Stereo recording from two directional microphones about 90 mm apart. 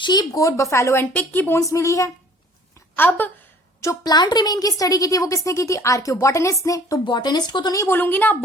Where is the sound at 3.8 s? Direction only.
35° left (ahead or behind).